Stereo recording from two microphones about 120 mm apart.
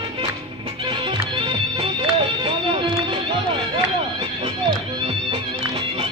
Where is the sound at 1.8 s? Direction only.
50° right (ahead or behind).